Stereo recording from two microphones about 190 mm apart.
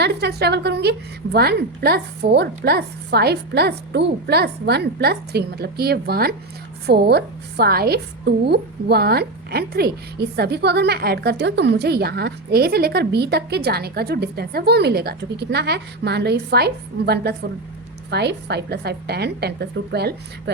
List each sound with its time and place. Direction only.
0.0 s a woman's voice: 60° right (ahead or behind)